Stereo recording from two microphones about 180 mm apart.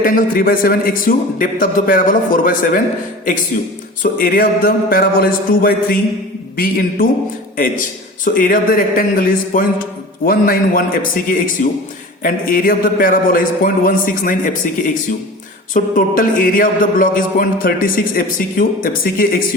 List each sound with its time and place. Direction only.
0.0 s speech: 50° left (ahead or behind)
4.0 s speech: 50° left (ahead or behind)